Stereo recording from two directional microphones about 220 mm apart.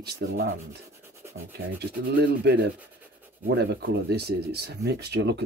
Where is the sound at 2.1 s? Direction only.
50° right (ahead or behind).